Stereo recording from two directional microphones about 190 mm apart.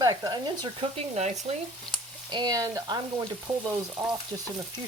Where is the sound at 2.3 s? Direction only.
20° right (ahead or behind).